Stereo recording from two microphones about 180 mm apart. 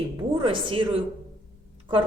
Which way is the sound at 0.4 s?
30° right (ahead or behind).